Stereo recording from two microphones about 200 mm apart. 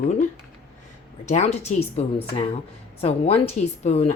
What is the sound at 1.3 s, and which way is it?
Speech, 35° left (ahead or behind).